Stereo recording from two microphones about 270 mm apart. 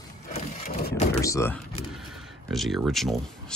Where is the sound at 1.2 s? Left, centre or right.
Centre.